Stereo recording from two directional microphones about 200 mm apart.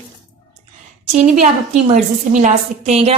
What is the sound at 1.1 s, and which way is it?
A woman's voice, 35° right (ahead or behind).